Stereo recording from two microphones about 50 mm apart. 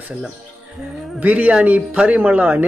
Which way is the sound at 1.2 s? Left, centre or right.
Right.